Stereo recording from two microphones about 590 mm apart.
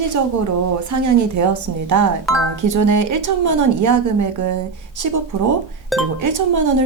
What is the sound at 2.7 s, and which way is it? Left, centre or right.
A woman's voice, right.